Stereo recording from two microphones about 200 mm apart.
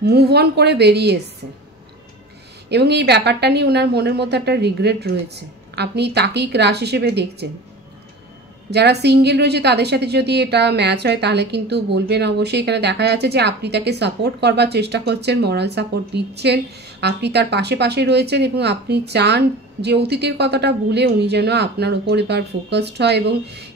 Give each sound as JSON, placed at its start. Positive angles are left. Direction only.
{"t": 0.0, "sound": "a woman's voice", "side_deg": -55}
{"t": 2.7, "sound": "a woman's voice", "side_deg": -55}
{"t": 8.6, "sound": "a woman's voice", "side_deg": -55}